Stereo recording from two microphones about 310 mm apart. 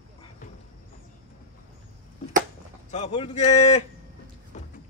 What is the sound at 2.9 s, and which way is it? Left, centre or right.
Speech, left.